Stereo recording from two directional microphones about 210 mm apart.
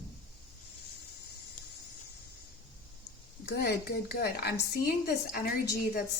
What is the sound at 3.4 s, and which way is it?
Speech, 50° left (ahead or behind).